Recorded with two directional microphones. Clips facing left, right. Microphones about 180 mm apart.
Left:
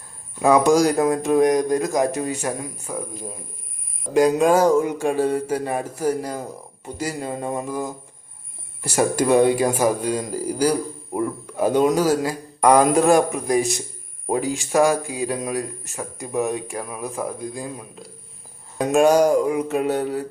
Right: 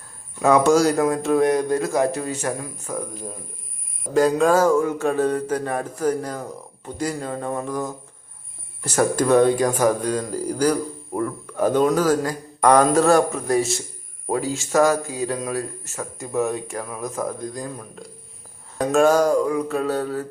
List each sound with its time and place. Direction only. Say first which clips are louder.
0.3 s speech: even; 15° left (ahead or behind)